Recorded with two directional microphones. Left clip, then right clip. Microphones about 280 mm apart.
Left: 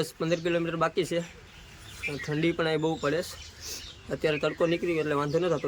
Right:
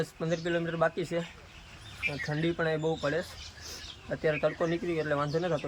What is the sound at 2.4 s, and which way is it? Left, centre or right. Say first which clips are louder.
Speech: left 4 dB; centre.